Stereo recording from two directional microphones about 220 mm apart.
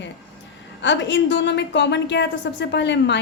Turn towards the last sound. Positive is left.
turn(degrees=50)  # may be behind; listen again after turning